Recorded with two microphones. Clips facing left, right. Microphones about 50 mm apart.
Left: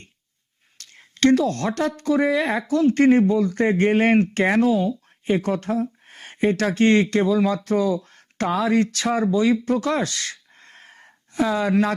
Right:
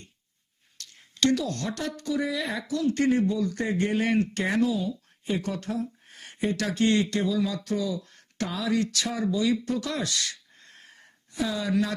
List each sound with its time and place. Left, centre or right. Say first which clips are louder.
0.8 s speech: left 6 dB; left